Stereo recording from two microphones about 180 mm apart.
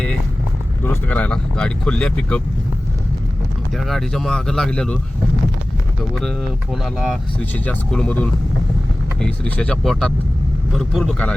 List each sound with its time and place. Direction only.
1.0 s speech: 10° left (ahead or behind)
3.8 s speech: centre (ahead or behind)
6.8 s speech: centre (ahead or behind)